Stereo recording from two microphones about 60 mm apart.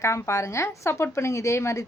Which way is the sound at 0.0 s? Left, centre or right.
Left.